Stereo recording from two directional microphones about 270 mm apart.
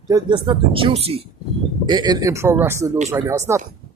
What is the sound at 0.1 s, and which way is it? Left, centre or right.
Speech, centre.